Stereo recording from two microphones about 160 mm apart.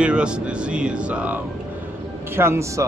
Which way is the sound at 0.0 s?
5° right (ahead or behind).